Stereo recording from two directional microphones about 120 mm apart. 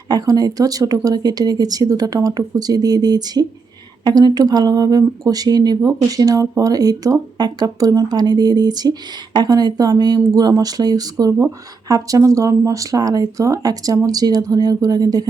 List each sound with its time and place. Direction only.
0.1 s speech: 30° right (ahead or behind)